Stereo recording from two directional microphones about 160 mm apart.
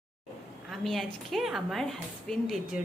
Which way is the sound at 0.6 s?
Centre (ahead or behind).